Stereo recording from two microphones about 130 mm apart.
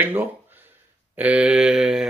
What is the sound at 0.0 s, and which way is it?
Speech, 15° right (ahead or behind).